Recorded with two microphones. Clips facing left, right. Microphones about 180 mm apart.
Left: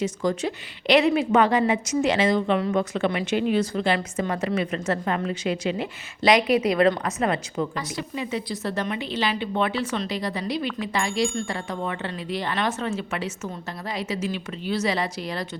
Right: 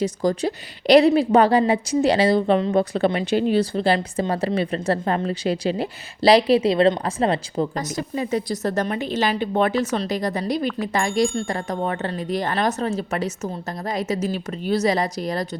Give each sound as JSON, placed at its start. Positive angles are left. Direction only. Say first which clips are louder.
{"t": 0.0, "sound": "a woman's voice", "louder": "right 3 dB", "side_deg": -35}
{"t": 7.8, "sound": "a woman's voice", "louder": "right 4 dB", "side_deg": -45}